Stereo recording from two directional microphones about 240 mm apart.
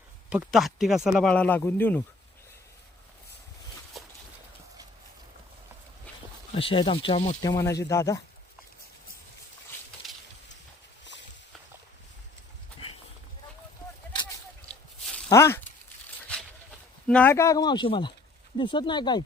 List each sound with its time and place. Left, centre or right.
0.3 s speech: centre
3.9 s a sound: centre
6.5 s speech: left
7.4 s speech: centre
15.3 s speech: centre
17.1 s speech: centre